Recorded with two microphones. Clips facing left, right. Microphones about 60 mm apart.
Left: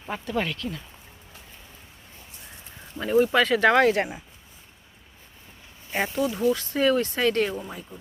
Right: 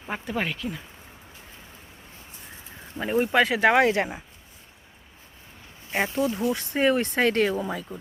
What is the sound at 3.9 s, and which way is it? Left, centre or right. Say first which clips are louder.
Speech: left 1 dB; right.